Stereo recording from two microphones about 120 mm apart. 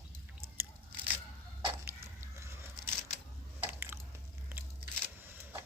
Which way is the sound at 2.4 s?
20° right (ahead or behind).